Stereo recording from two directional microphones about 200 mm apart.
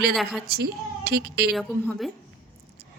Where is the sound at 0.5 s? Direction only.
50° right (ahead or behind).